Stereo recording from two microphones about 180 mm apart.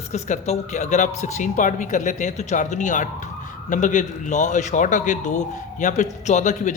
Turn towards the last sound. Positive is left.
turn(degrees=40)  # may be behind; listen again after turning